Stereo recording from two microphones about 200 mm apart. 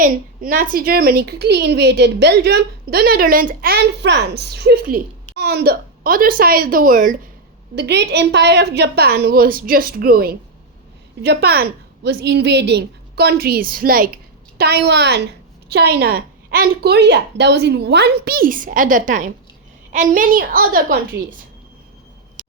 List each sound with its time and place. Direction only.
0.0 s a woman's voice: 45° right (ahead or behind)
7.8 s a woman's voice: 55° right (ahead or behind)